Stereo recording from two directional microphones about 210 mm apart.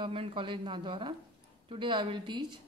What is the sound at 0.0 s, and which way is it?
A woman's voice, 25° right (ahead or behind).